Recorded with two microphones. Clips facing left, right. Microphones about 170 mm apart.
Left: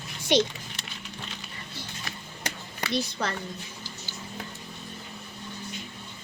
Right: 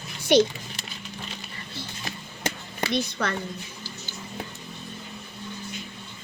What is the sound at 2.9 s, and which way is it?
Speech, 30° left (ahead or behind).